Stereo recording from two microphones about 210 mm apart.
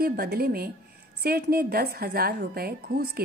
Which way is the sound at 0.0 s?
45° right (ahead or behind).